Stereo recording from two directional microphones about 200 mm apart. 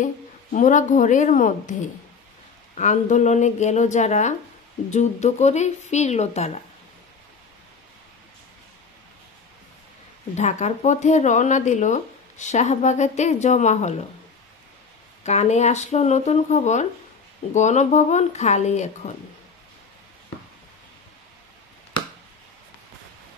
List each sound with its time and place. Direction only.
0.0 s speech: 40° left (ahead or behind)
10.3 s speech: 35° left (ahead or behind)
15.2 s speech: 35° left (ahead or behind)